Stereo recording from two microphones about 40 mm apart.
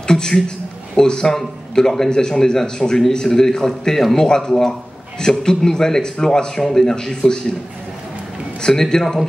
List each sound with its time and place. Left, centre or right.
0.0 s a man's voice: centre
8.6 s a man's voice: centre